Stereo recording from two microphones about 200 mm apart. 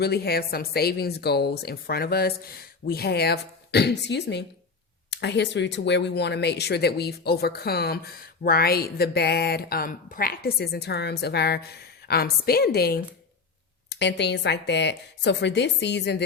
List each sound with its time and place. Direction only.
0.0 s speech: 50° left (ahead or behind)